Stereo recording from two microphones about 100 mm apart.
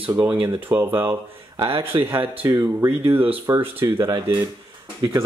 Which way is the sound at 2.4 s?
30° right (ahead or behind).